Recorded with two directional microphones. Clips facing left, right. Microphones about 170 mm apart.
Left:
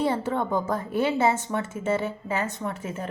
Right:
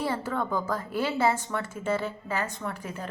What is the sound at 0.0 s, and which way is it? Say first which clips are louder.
A woman's voice: left 4 dB; 25° left (ahead or behind).